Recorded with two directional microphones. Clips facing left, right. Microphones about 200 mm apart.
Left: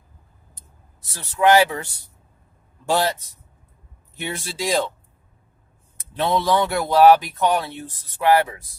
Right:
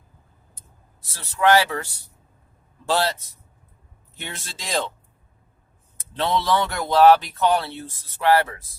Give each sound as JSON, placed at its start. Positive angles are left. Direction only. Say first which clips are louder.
{"t": 1.1, "sound": "speech", "louder": "left 2 dB", "side_deg": 20}
{"t": 4.2, "sound": "speech", "louder": "left 9 dB", "side_deg": 10}
{"t": 6.1, "sound": "speech", "louder": "left 2 dB", "side_deg": 15}